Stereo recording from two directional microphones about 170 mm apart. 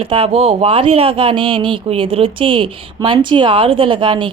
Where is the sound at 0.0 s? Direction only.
35° right (ahead or behind).